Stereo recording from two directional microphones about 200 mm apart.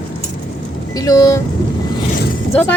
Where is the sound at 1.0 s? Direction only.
15° left (ahead or behind).